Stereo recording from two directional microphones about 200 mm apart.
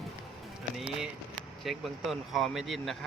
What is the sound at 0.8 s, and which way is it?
Speech, centre (ahead or behind).